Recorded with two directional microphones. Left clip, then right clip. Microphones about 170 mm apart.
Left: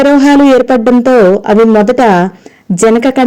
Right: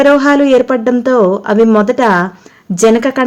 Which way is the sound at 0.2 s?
20° left (ahead or behind).